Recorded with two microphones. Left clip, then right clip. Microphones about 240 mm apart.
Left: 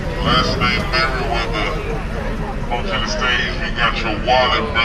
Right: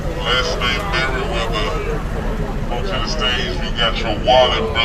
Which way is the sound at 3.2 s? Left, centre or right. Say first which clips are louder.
Left 1 dB; right.